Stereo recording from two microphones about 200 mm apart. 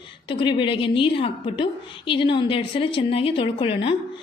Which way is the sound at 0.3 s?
25° left (ahead or behind).